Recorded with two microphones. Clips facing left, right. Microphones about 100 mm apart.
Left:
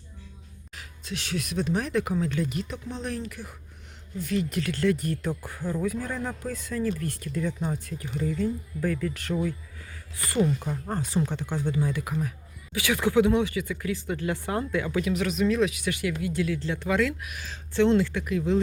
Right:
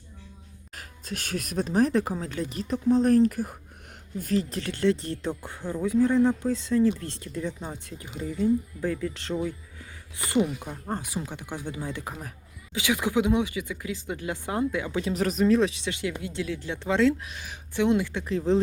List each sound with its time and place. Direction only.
0.8 s speech: 45° right (ahead or behind); by 15.0 s 15° right (ahead or behind)
15.0 s speech: 35° right (ahead or behind)